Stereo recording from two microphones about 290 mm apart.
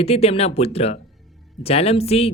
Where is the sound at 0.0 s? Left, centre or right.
Left.